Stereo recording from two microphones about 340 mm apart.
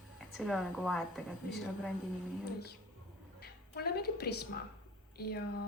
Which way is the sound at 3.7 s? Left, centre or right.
Left.